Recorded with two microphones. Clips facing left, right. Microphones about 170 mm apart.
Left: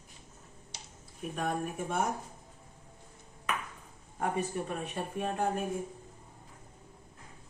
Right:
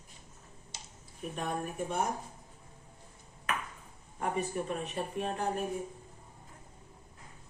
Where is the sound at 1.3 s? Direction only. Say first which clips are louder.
Left 2 dB; 55° left (ahead or behind).